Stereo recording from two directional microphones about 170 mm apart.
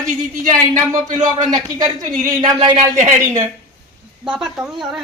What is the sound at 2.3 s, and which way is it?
Speech, 25° right (ahead or behind).